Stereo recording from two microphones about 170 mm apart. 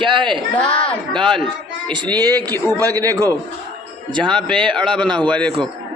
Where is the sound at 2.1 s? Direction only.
25° right (ahead or behind).